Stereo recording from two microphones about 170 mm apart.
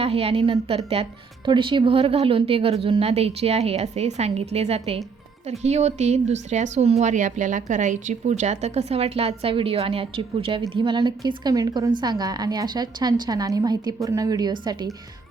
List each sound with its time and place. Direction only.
0.0 s a woman's voice: 35° right (ahead or behind)